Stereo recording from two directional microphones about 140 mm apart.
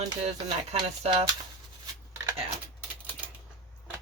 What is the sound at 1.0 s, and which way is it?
Speech, 50° right (ahead or behind).